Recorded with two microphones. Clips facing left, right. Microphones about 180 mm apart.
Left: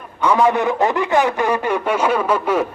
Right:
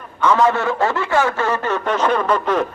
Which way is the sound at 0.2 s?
15° left (ahead or behind).